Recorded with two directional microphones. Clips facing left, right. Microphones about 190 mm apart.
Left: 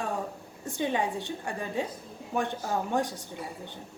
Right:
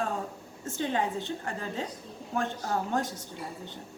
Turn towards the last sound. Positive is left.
turn(degrees=15)  # may be behind; listen again after turning